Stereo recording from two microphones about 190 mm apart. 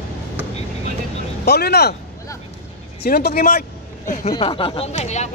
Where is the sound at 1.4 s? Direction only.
60° left (ahead or behind).